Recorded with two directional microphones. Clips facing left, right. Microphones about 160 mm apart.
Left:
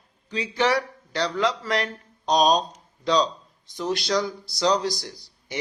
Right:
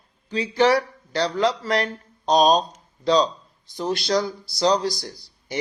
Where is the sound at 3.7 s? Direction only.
35° right (ahead or behind).